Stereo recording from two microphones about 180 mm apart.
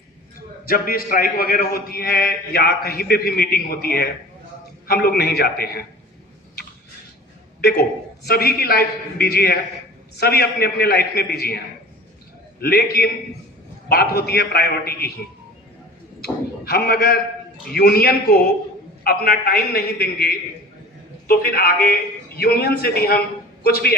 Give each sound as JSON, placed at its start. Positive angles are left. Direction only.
{"t": 0.7, "sound": "a man's voice", "side_deg": 55}
{"t": 7.6, "sound": "a man's voice", "side_deg": 65}
{"t": 16.2, "sound": "a man's voice", "side_deg": 60}